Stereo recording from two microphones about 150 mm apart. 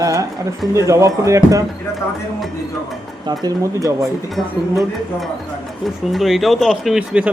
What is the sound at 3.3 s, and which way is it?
Speech, 25° right (ahead or behind).